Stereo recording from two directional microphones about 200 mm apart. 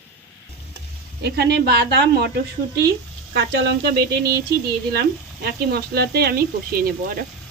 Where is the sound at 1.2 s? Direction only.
55° right (ahead or behind).